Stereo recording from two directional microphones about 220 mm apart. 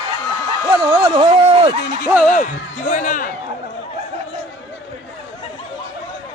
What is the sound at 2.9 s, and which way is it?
Speech, 35° left (ahead or behind).